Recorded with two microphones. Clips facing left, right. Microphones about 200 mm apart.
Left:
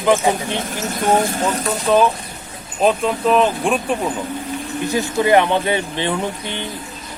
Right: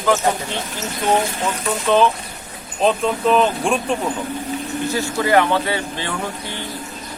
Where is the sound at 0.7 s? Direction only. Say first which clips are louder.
Left 2 dB; 45° left (ahead or behind).